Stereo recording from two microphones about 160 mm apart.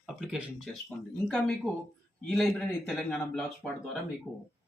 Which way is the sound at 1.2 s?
5° left (ahead or behind).